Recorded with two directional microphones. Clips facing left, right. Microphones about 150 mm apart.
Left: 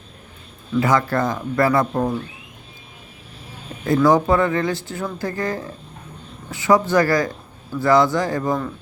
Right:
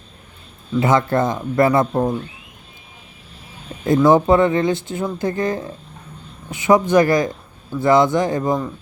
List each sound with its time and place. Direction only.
0.8 s speech: 25° right (ahead or behind)
3.8 s speech: 20° right (ahead or behind)